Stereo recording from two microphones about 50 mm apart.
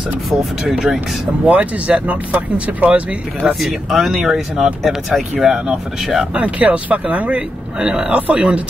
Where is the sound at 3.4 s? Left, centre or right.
Centre.